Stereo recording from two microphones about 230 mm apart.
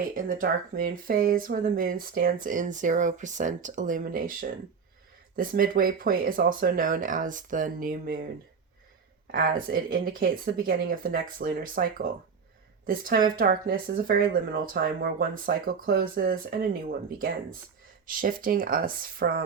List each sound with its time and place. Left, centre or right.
0.3 s speech: right